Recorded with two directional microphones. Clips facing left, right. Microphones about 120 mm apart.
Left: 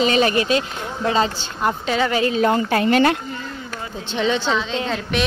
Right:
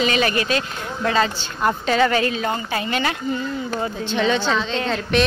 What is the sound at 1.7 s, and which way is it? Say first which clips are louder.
Speech: right 2 dB; 10° left (ahead or behind).